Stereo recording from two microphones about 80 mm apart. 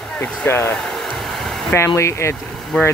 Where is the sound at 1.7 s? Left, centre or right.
Left.